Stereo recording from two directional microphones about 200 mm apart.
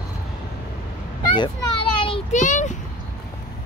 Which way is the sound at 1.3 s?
25° left (ahead or behind).